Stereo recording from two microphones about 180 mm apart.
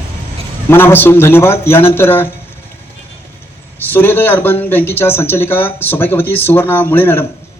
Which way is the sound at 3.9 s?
10° left (ahead or behind).